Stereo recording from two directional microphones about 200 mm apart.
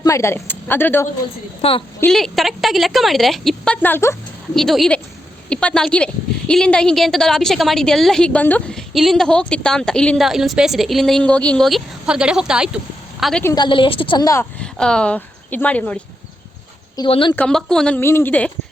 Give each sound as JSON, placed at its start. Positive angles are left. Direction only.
{"t": 0.0, "sound": "speech", "side_deg": 15}
{"t": 1.6, "sound": "a woman's voice", "side_deg": 30}
{"t": 2.0, "sound": "a woman's voice", "side_deg": 5}
{"t": 4.5, "sound": "a woman's voice", "side_deg": 0}
{"t": 13.4, "sound": "a woman's voice", "side_deg": 20}
{"t": 14.6, "sound": "speech", "side_deg": 5}
{"t": 17.0, "sound": "a woman's voice", "side_deg": 25}
{"t": 17.3, "sound": "speech", "side_deg": 5}